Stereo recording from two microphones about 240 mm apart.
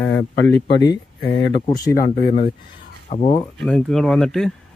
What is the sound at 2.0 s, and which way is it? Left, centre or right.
Speech, left.